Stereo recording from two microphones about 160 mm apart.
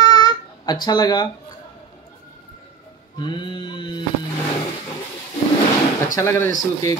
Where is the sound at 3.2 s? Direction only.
30° left (ahead or behind).